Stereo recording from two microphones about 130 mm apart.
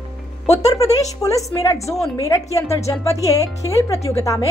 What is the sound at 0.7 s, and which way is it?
Speech, 25° left (ahead or behind).